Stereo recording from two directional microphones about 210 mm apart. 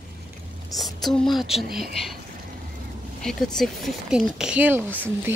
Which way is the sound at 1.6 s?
45° right (ahead or behind).